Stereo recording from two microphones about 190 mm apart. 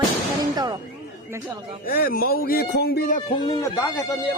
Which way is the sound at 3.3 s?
20° left (ahead or behind).